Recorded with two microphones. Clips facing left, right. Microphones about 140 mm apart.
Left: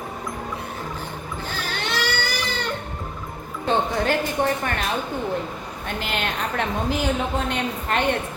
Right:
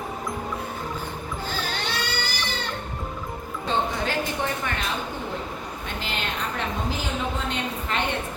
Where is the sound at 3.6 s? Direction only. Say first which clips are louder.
Left 5 dB; 50° left (ahead or behind).